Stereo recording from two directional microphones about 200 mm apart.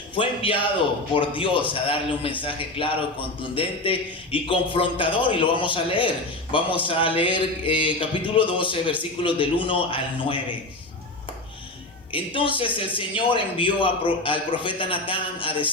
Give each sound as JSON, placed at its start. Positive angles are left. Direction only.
{"t": 0.2, "sound": "a man's voice", "side_deg": 25}
{"t": 12.1, "sound": "a man's voice", "side_deg": 25}